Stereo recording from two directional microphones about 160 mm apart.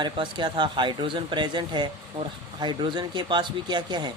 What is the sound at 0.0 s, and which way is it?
Speech, 30° right (ahead or behind).